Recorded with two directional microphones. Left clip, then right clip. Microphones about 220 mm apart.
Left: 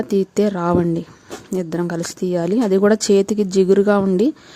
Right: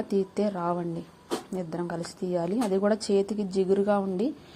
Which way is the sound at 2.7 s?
65° left (ahead or behind).